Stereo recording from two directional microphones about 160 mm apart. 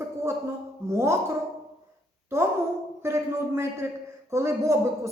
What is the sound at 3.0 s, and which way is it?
Speech, 15° right (ahead or behind).